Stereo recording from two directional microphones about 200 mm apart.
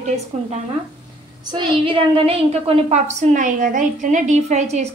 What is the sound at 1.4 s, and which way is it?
A woman's voice, 25° right (ahead or behind).